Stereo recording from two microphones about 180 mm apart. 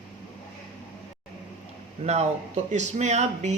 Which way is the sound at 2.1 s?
40° right (ahead or behind).